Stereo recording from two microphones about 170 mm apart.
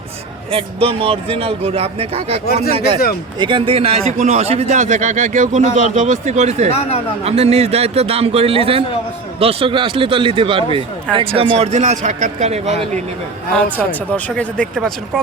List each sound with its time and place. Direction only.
0.5 s a man's voice: 35° right (ahead or behind)
2.5 s speech: 65° left (ahead or behind)
2.7 s a man's voice: 35° right (ahead or behind)
13.6 s speech: 10° left (ahead or behind)